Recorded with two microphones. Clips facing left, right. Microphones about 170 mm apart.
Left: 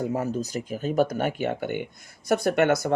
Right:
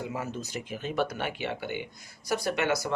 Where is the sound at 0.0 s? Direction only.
40° left (ahead or behind).